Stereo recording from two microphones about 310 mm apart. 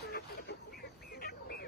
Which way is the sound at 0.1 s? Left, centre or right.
Left.